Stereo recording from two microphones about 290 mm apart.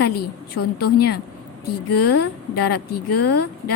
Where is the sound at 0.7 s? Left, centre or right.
Left.